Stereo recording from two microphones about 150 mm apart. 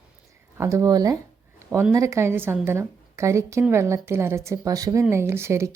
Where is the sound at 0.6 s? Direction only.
20° right (ahead or behind).